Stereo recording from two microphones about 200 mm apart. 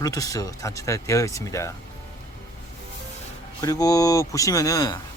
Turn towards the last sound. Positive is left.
turn(degrees=20)  # may be behind; listen again after turning